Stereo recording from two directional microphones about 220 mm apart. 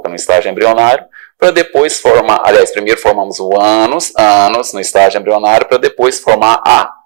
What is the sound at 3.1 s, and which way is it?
Speech, 30° right (ahead or behind).